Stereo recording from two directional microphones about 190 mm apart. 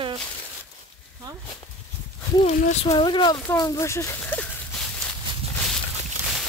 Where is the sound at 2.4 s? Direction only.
35° left (ahead or behind).